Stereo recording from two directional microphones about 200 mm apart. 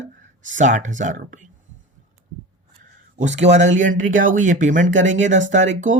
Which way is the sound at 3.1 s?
35° right (ahead or behind).